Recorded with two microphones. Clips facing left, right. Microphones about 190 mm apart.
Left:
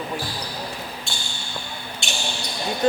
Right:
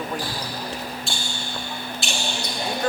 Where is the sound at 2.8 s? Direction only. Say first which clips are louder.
Left 6 dB; 20° left (ahead or behind).